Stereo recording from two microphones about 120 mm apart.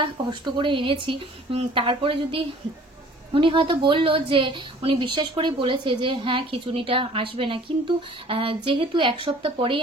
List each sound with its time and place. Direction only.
0.0 s a woman's voice: 40° right (ahead or behind)